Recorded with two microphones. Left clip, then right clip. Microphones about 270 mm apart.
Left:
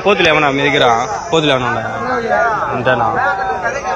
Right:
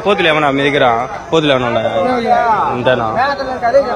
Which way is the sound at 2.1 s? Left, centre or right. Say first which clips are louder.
Left 1 dB; right.